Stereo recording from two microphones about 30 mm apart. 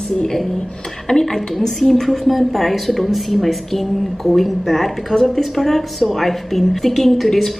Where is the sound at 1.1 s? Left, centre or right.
Centre.